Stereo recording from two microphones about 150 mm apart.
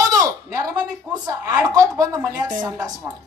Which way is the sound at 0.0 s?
25° right (ahead or behind).